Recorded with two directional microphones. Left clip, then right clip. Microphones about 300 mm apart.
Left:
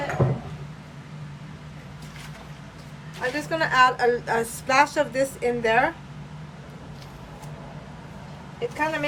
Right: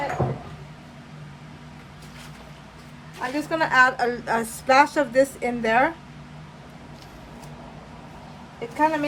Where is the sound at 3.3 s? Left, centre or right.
Centre.